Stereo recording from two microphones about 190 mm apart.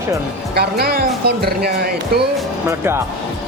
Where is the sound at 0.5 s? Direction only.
55° right (ahead or behind).